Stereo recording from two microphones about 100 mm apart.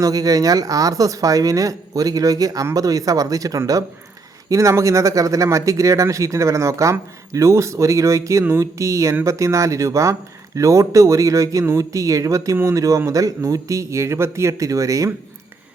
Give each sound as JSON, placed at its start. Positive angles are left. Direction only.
{"t": 0.0, "sound": "speech", "side_deg": -35}